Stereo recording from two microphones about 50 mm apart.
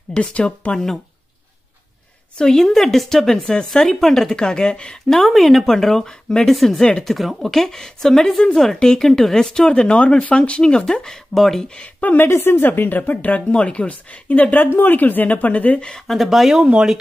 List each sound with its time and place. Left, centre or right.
0.1 s speech: left
2.3 s speech: centre
5.1 s speech: centre
7.2 s speech: centre
11.3 s speech: centre
11.8 s speech: left
12.2 s speech: left
16.1 s speech: centre